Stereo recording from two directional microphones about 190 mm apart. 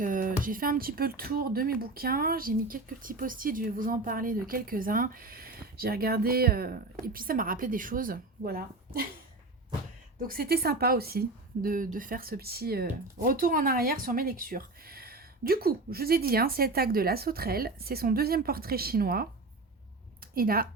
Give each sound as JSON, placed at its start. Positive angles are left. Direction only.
{"t": 0.0, "sound": "speech", "side_deg": -45}
{"t": 10.2, "sound": "speech", "side_deg": -50}
{"t": 20.3, "sound": "speech", "side_deg": -50}